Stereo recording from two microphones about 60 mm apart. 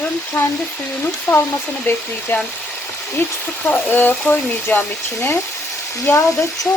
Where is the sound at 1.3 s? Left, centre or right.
Left.